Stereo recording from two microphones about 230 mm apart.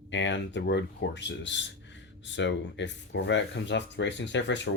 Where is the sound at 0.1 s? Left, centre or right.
Left.